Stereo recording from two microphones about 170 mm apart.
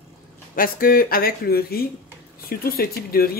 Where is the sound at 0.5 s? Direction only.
55° left (ahead or behind).